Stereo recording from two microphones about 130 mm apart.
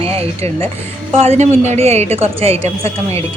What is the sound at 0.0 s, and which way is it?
A woman's voice, 50° right (ahead or behind).